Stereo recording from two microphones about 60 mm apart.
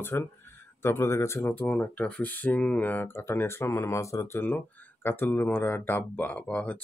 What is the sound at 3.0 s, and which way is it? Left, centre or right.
Speech, left.